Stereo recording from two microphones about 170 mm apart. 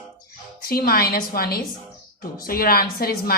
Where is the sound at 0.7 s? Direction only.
60° left (ahead or behind).